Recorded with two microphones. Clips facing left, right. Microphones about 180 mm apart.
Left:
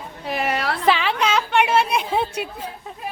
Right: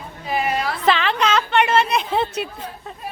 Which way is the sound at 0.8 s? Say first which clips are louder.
Right 1 dB; 10° left (ahead or behind).